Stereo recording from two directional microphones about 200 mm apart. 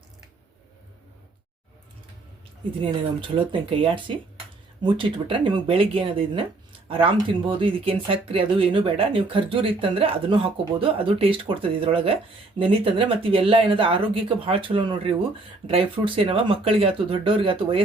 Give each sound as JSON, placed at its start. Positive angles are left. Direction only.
{"t": 2.8, "sound": "speech", "side_deg": -25}